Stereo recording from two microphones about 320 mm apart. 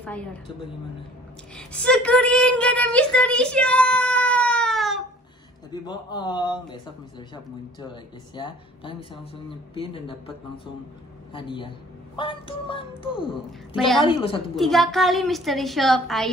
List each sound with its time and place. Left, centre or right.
0.0 s a woman's voice: centre
1.6 s child singing: centre
5.7 s speech: centre
11.3 s speech: centre
13.5 s a woman's voice: centre
14.0 s speech: centre
14.5 s a woman's voice: centre